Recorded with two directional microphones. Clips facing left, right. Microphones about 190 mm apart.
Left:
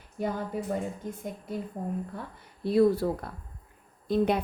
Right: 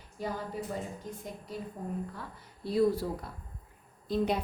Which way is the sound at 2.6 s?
60° left (ahead or behind).